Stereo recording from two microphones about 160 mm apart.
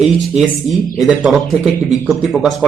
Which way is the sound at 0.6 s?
25° left (ahead or behind).